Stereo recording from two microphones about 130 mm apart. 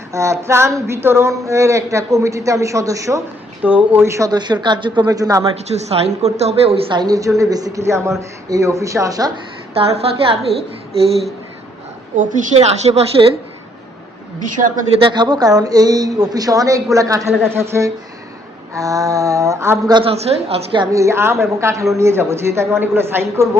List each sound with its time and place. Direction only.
0.1 s speech: 20° right (ahead or behind)
4.3 s a woman's voice: 35° right (ahead or behind)
5.5 s a woman's voice: 55° right (ahead or behind); by 9.3 s 25° right (ahead or behind)
9.7 s a woman's voice: 50° right (ahead or behind)
12.1 s a woman's voice: 75° right (ahead or behind)
12.5 s a woman's voice: 55° right (ahead or behind)
14.9 s speech: 40° right (ahead or behind); by 19.8 s 20° right (ahead or behind)
19.9 s a woman's voice: 40° right (ahead or behind)
20.1 s a woman's voice: 50° right (ahead or behind)
20.9 s speech: 20° right (ahead or behind)